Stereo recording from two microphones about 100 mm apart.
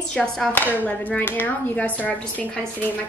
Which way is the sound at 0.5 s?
20° left (ahead or behind).